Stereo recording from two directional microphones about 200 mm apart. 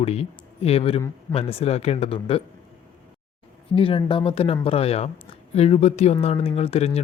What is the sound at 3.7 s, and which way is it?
Speech, 25° left (ahead or behind).